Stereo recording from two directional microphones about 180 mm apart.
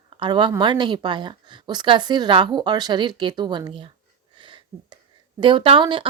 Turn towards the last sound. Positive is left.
turn(degrees=-25)  # may be behind; listen again after turning